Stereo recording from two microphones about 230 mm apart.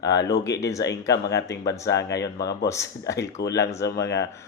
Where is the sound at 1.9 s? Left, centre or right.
Left.